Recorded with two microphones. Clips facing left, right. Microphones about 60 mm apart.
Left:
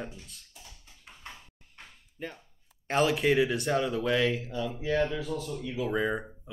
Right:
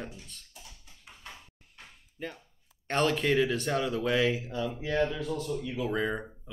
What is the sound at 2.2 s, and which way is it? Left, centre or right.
Speech, centre.